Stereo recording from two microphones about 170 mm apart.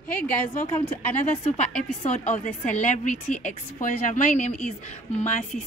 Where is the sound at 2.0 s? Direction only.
40° left (ahead or behind).